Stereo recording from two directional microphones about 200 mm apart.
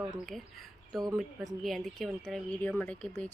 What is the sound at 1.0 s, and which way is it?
Speech, 15° right (ahead or behind).